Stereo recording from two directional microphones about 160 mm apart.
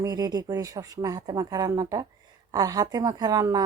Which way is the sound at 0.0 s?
25° right (ahead or behind).